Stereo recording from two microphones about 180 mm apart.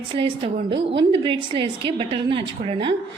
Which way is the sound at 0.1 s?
30° right (ahead or behind).